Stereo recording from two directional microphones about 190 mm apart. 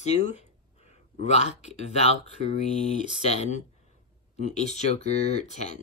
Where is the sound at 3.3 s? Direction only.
35° left (ahead or behind).